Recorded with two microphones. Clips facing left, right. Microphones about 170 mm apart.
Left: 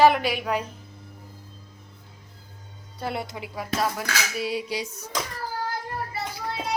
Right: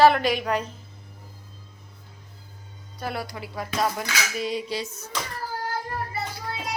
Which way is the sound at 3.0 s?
25° left (ahead or behind).